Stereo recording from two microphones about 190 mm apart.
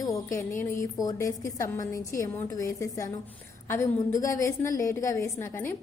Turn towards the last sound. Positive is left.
turn(degrees=15)  # may be behind; listen again after turning